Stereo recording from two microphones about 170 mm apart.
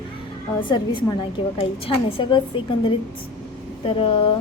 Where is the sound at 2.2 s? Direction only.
30° left (ahead or behind).